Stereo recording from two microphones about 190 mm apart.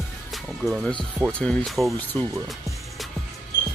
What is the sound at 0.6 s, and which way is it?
Speech, 5° left (ahead or behind).